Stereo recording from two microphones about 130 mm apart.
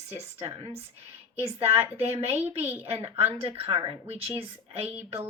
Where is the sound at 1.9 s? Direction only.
50° right (ahead or behind).